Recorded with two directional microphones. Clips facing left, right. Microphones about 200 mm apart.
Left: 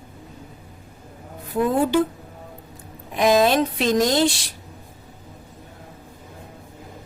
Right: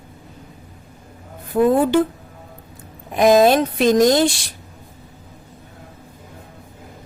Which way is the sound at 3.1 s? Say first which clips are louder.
Right 4 dB; 50° right (ahead or behind).